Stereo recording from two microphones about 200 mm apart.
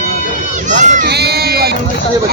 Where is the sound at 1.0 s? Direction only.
55° right (ahead or behind).